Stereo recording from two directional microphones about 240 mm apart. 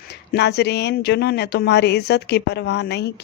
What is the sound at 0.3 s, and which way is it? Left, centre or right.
Speech, left.